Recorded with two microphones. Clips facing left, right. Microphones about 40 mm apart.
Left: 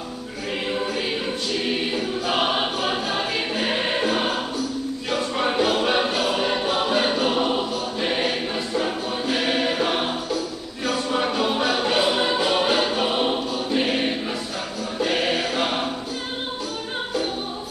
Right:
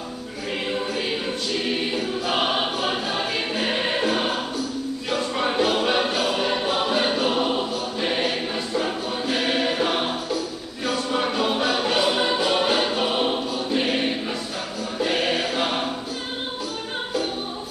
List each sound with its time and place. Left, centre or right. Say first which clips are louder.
0.7 s choir: left 1 dB; centre